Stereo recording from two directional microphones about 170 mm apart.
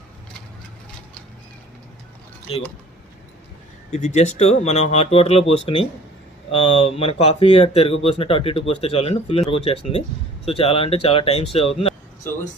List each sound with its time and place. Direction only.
3.9 s speech: 40° left (ahead or behind)